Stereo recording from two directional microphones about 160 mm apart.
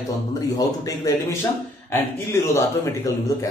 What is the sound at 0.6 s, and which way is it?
A man's voice, 20° left (ahead or behind).